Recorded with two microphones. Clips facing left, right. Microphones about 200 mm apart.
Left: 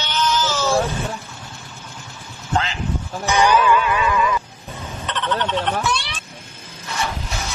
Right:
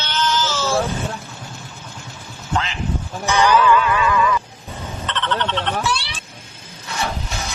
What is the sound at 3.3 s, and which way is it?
Music, 15° left (ahead or behind).